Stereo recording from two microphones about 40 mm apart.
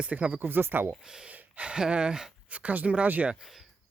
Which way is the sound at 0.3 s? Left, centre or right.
Right.